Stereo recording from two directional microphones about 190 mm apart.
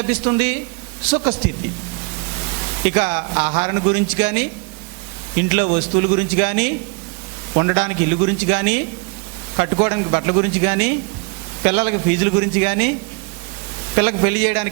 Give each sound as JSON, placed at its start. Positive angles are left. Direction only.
{"t": 0.0, "sound": "a man's voice", "side_deg": -15}
{"t": 2.8, "sound": "a man's voice", "side_deg": -20}
{"t": 13.9, "sound": "a man's voice", "side_deg": -15}